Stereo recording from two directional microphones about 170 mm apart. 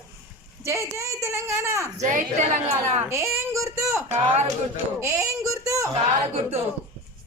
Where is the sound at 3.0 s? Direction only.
15° right (ahead or behind).